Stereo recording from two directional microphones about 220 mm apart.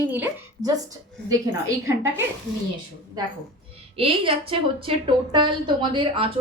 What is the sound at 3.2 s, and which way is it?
Speech, 20° right (ahead or behind).